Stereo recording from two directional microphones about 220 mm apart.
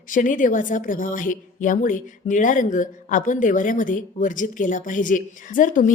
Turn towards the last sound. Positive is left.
turn(degrees=35)  # may be behind; listen again after turning